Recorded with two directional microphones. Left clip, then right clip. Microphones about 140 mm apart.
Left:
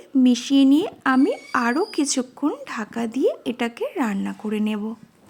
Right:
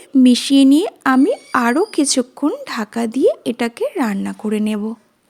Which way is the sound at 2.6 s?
55° right (ahead or behind).